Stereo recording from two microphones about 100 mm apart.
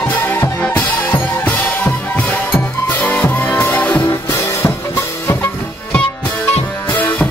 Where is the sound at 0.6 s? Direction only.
15° left (ahead or behind).